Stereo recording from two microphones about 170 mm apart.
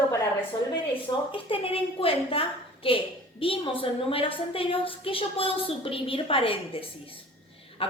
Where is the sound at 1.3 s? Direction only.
30° left (ahead or behind).